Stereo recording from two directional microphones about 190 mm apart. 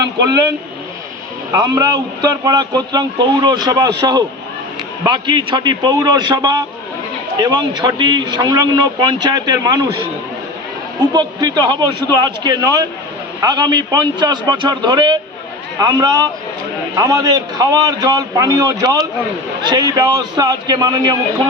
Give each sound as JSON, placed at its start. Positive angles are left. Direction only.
{"t": 0.0, "sound": "a man's voice", "side_deg": -20}
{"t": 1.5, "sound": "a man's voice", "side_deg": -20}
{"t": 11.1, "sound": "a man's voice", "side_deg": -20}